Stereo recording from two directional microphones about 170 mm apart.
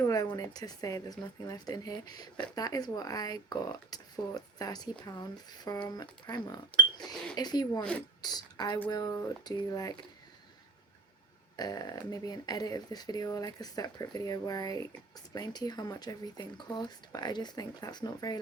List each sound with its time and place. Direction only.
0.0 s speech: 20° left (ahead or behind)
11.5 s speech: 25° left (ahead or behind)